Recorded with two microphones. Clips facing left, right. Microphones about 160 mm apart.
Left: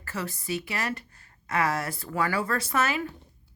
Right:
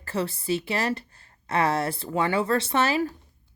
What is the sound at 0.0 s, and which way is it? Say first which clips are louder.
Speech: right 6 dB; 30° right (ahead or behind).